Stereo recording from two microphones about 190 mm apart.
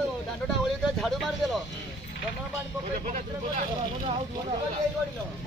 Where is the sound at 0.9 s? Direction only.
Centre (ahead or behind).